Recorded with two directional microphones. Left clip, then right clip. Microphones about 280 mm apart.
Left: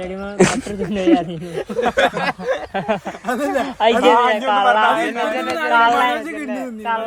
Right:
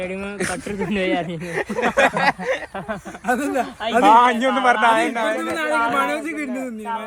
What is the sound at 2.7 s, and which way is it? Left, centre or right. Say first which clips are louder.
Speech: left 8 dB; left.